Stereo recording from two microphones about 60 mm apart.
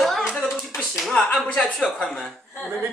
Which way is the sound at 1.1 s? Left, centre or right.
Centre.